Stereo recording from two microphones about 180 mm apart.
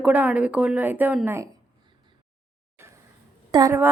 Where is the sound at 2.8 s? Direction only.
15° right (ahead or behind).